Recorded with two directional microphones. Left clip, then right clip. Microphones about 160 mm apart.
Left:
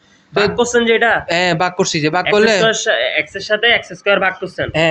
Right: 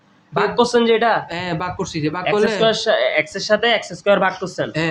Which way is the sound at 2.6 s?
10° right (ahead or behind).